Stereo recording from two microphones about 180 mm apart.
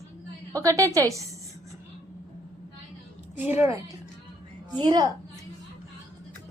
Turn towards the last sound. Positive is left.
turn(degrees=-25)  # may be behind; listen again after turning